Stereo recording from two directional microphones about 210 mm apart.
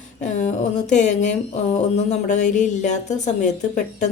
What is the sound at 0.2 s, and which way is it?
Speech, 35° left (ahead or behind).